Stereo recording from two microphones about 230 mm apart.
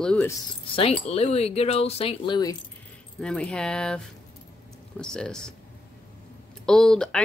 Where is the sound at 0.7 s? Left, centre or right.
Left.